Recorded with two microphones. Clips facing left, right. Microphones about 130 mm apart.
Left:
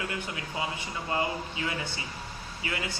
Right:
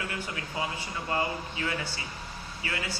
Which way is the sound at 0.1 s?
20° left (ahead or behind).